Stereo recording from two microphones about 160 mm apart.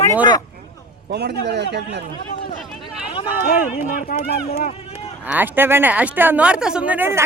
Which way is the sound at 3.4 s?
65° left (ahead or behind).